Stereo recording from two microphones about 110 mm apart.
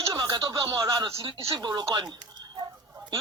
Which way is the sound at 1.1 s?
55° right (ahead or behind).